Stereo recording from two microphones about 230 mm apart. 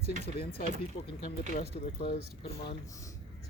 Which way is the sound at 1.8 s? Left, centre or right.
Left.